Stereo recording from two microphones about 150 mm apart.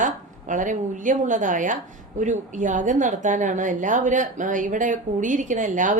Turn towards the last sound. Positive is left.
turn(degrees=-60)  # may be behind; listen again after turning